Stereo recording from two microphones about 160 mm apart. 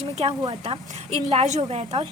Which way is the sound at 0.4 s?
35° right (ahead or behind).